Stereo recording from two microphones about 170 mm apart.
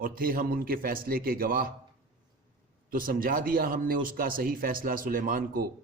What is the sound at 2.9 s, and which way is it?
A man's voice, 55° right (ahead or behind).